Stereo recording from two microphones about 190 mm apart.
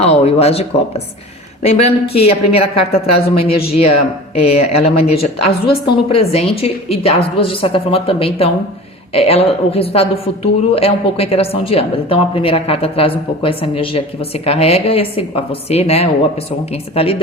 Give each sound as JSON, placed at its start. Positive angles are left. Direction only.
{"t": 0.0, "sound": "a woman's voice", "side_deg": 35}